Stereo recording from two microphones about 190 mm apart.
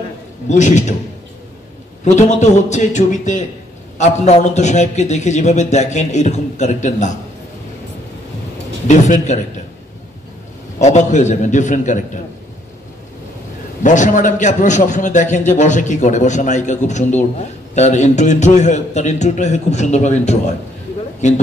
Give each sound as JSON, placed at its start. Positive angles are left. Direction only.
{"t": 0.5, "sound": "a man's voice", "side_deg": 40}
{"t": 2.1, "sound": "a man's voice", "side_deg": 40}
{"t": 8.8, "sound": "a man's voice", "side_deg": 40}
{"t": 10.8, "sound": "a man's voice", "side_deg": 35}
{"t": 13.8, "sound": "a man's voice", "side_deg": 40}